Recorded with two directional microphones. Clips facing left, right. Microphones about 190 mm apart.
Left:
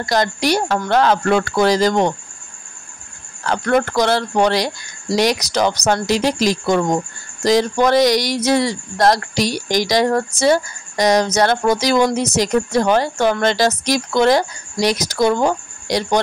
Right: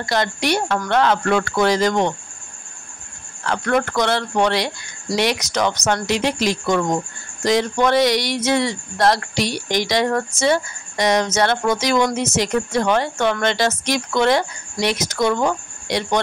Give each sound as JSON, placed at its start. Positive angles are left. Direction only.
{"t": 0.1, "sound": "speech", "side_deg": 40}
{"t": 3.4, "sound": "speech", "side_deg": 35}